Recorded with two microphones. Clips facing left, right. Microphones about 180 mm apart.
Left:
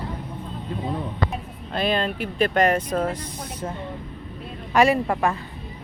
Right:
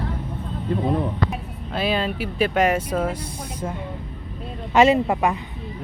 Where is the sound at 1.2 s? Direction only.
5° right (ahead or behind).